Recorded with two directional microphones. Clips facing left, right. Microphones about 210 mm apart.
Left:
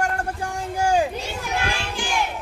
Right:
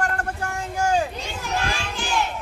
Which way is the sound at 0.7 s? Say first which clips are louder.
Left 2 dB; 10° left (ahead or behind).